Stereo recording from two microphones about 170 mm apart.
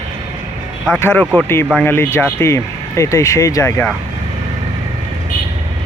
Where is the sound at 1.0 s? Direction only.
10° left (ahead or behind).